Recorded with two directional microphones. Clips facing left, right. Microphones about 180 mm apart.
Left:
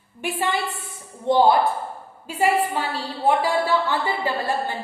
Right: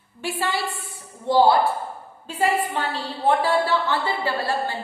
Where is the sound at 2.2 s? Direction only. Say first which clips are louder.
Left 2 dB; 10° left (ahead or behind).